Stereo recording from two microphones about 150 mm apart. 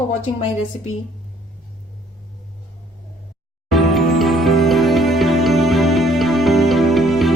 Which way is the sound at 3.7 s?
Centre (ahead or behind).